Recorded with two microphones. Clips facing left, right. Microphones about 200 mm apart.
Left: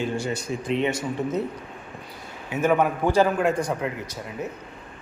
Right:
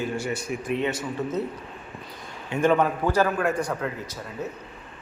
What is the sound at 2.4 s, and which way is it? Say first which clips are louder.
A man's voice: even; 5° left (ahead or behind).